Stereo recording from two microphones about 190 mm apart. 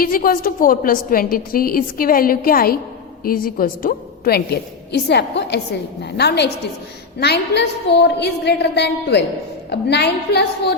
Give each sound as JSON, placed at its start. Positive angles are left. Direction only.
{"t": 0.0, "sound": "a woman's voice", "side_deg": 50}